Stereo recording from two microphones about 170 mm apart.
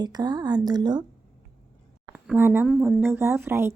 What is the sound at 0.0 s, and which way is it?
A woman's voice, 25° right (ahead or behind).